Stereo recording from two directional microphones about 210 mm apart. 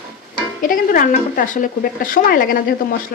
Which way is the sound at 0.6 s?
40° left (ahead or behind).